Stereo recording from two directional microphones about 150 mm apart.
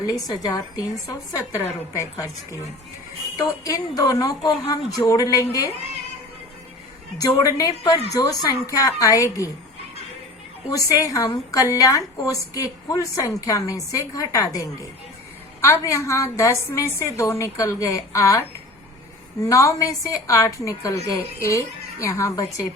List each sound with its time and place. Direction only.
0.1 s a woman's voice: 25° left (ahead or behind)
7.2 s a woman's voice: 25° left (ahead or behind)
10.7 s a woman's voice: 25° left (ahead or behind)